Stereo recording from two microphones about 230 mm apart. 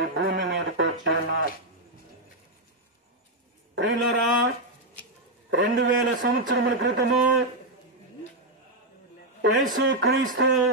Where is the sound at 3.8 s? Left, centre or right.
Right.